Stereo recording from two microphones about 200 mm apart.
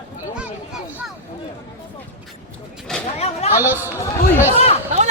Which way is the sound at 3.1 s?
30° left (ahead or behind).